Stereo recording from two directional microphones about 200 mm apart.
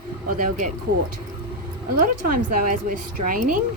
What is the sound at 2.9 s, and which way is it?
Speech, 40° right (ahead or behind).